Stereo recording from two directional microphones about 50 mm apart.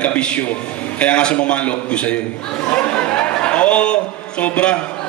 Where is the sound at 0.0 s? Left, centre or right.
Left.